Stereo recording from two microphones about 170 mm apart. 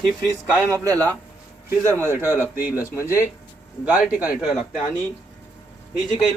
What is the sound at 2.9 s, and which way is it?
Speech, 15° left (ahead or behind).